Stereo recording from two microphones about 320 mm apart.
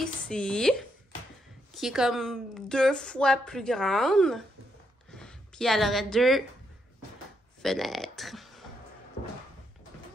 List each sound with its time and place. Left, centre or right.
0.0 s a woman's voice: centre
7.6 s speech: centre